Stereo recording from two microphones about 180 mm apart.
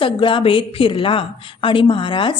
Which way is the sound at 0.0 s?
30° left (ahead or behind).